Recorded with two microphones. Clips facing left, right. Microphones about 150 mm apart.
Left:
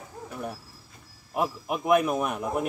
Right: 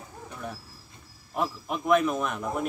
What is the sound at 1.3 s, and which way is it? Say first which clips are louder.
A man's voice: left 2 dB; 10° left (ahead or behind).